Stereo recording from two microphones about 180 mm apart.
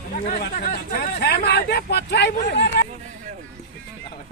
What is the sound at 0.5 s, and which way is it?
Speech, 55° left (ahead or behind).